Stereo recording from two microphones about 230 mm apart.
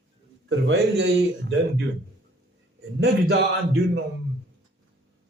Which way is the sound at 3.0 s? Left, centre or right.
Right.